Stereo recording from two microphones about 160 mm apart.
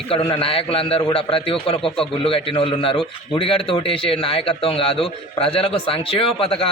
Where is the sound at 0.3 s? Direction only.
35° left (ahead or behind).